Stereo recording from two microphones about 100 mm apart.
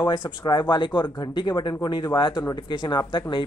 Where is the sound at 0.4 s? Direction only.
50° left (ahead or behind).